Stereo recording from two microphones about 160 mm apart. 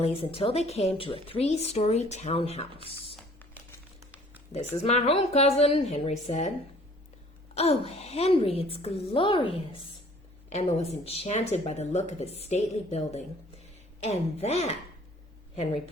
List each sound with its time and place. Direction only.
0.0 s a woman's voice: 35° left (ahead or behind)
4.8 s a woman's voice: 40° left (ahead or behind)
7.5 s a woman's voice: 40° left (ahead or behind)
10.5 s a woman's voice: 45° left (ahead or behind)